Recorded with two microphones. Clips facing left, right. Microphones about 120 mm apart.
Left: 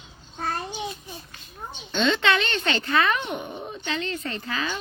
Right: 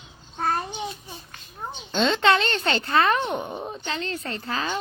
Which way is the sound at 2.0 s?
35° right (ahead or behind).